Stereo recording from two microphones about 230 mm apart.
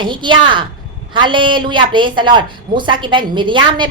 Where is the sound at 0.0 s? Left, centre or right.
Right.